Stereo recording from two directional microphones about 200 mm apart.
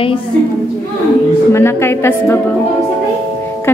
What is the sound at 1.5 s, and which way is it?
Speech, 10° left (ahead or behind).